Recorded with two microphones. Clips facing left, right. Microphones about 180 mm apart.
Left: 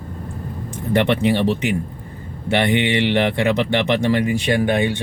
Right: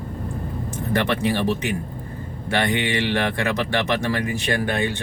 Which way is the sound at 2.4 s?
20° left (ahead or behind).